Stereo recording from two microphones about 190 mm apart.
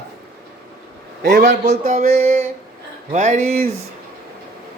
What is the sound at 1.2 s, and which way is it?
Speech, 60° right (ahead or behind).